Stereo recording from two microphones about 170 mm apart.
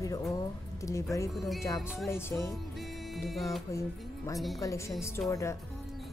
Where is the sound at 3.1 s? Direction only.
Centre (ahead or behind).